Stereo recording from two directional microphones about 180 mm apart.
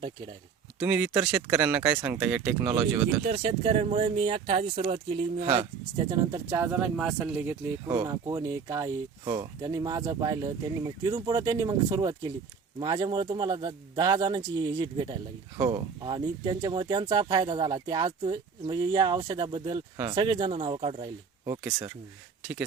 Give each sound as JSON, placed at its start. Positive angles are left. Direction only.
{"t": 0.8, "sound": "speech", "side_deg": -5}
{"t": 3.2, "sound": "speech", "side_deg": -35}
{"t": 6.5, "sound": "speech", "side_deg": -10}
{"t": 21.4, "sound": "speech", "side_deg": -20}